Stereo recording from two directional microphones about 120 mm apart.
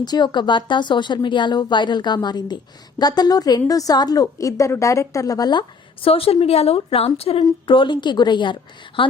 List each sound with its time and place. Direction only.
0.0 s a woman's voice: 35° left (ahead or behind); by 7.4 s 55° left (ahead or behind)
7.7 s a woman's voice: 40° left (ahead or behind)